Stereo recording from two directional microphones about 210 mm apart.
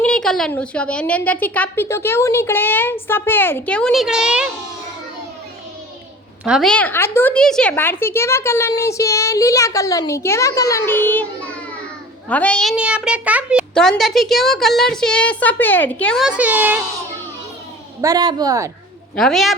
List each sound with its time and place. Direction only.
0.0 s a woman's voice: 5° left (ahead or behind)
6.4 s a woman's voice: centre (ahead or behind)
12.3 s a child's voice: 5° left (ahead or behind)
18.0 s a man's voice: 20° right (ahead or behind)
19.1 s a child's voice: centre (ahead or behind)